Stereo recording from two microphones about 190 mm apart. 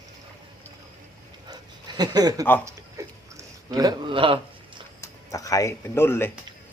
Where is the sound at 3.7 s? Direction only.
20° right (ahead or behind).